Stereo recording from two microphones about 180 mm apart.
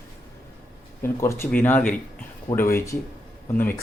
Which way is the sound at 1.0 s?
15° left (ahead or behind).